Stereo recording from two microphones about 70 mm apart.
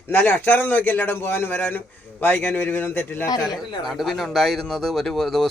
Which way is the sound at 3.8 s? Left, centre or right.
Centre.